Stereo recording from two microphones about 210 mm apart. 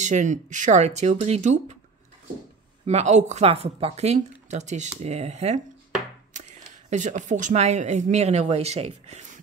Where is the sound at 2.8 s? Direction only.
30° right (ahead or behind).